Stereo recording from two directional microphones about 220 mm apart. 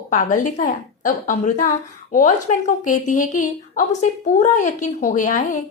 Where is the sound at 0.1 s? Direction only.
35° left (ahead or behind).